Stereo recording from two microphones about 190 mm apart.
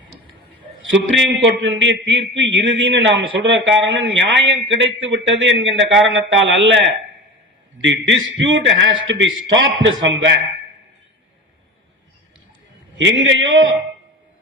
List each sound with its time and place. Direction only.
1.1 s a man's voice: 75° right (ahead or behind)
13.0 s a man's voice: 85° right